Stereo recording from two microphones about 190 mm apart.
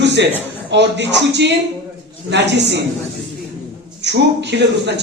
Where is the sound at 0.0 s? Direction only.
65° right (ahead or behind).